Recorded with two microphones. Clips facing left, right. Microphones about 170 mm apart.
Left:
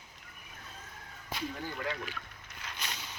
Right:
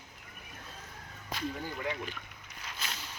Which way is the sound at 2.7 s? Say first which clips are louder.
Even; 5° right (ahead or behind).